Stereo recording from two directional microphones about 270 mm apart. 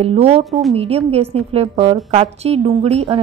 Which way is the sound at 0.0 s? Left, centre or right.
Right.